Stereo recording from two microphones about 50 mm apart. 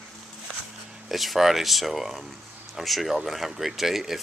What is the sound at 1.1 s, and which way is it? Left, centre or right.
Speech, centre.